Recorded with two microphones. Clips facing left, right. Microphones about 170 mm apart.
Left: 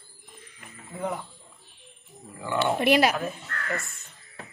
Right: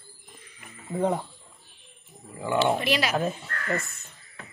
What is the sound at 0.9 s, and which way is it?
Speech, 35° right (ahead or behind).